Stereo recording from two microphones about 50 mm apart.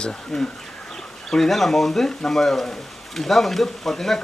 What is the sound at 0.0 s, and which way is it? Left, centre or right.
Speech, centre.